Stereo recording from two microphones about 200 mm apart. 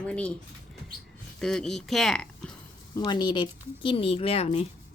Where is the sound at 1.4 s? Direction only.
5° left (ahead or behind).